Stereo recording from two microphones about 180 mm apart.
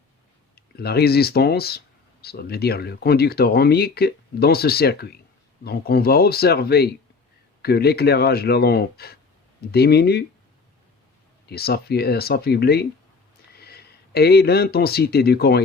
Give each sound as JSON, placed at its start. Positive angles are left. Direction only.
{"t": 0.5, "sound": "speech", "side_deg": 60}
{"t": 11.4, "sound": "speech", "side_deg": 60}